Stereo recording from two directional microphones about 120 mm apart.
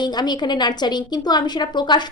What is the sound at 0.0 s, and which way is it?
A woman's voice, 35° left (ahead or behind).